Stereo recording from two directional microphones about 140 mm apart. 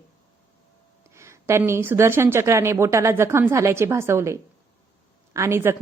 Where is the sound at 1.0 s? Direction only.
20° right (ahead or behind).